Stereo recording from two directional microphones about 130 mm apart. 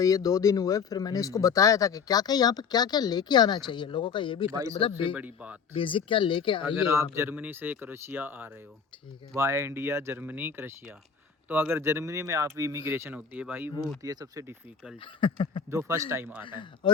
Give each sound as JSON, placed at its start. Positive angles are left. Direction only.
{"t": 0.0, "sound": "speech", "side_deg": 30}
{"t": 5.1, "sound": "speech", "side_deg": -10}
{"t": 5.7, "sound": "speech", "side_deg": 40}
{"t": 6.8, "sound": "speech", "side_deg": -20}
{"t": 14.0, "sound": "speech", "side_deg": -25}
{"t": 15.0, "sound": "speech", "side_deg": 40}
{"t": 15.7, "sound": "speech", "side_deg": -20}
{"t": 16.4, "sound": "speech", "side_deg": 40}